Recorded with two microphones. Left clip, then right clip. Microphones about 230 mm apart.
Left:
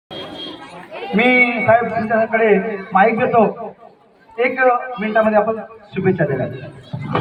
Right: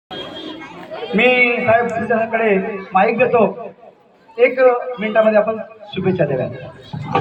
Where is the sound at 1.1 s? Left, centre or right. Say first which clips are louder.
Right 1 dB; right.